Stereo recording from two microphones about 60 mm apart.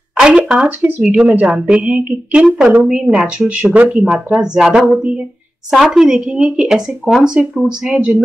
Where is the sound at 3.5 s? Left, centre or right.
Right.